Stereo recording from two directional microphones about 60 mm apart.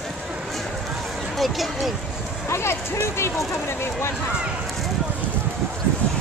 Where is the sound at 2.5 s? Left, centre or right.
Left.